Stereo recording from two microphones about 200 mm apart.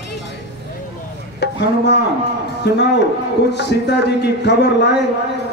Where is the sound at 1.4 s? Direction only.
60° left (ahead or behind).